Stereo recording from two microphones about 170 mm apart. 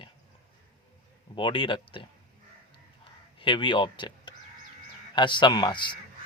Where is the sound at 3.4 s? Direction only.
30° left (ahead or behind).